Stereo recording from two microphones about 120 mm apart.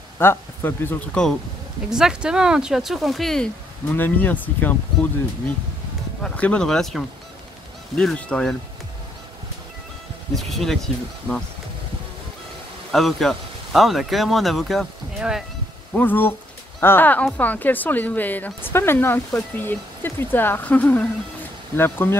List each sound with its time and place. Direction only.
0.2 s speech: 20° left (ahead or behind)
1.9 s speech: 5° right (ahead or behind)
3.9 s speech: 15° left (ahead or behind)
6.2 s speech: 10° left (ahead or behind)
10.3 s speech: centre (ahead or behind)
12.9 s speech: centre (ahead or behind)
15.9 s speech: 15° left (ahead or behind)